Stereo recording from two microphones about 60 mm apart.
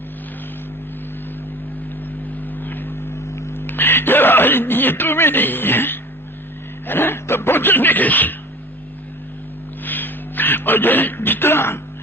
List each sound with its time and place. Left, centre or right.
2.0 s vehicle: left
3.1 s a sound: left
3.5 s speech: left
6.8 s music: left
9.8 s speech: left